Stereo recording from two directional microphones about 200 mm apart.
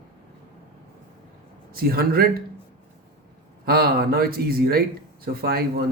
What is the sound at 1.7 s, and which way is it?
Speech, 50° right (ahead or behind).